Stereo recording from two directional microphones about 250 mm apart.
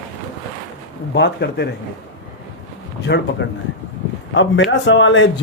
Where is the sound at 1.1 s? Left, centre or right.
Left.